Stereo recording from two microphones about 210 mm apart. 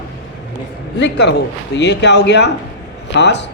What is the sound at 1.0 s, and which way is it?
A woman's voice, 55° left (ahead or behind).